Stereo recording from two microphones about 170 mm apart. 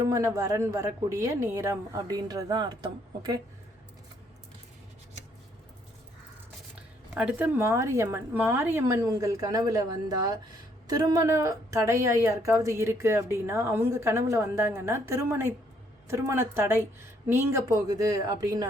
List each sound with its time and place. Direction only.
0.0 s a woman's voice: 20° right (ahead or behind)
7.1 s a woman's voice: 10° right (ahead or behind)